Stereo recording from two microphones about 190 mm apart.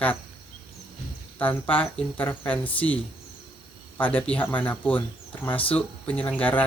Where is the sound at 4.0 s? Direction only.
10° left (ahead or behind).